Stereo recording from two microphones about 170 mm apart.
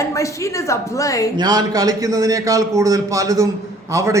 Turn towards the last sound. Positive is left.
turn(degrees=-20)  # may be behind; listen again after turning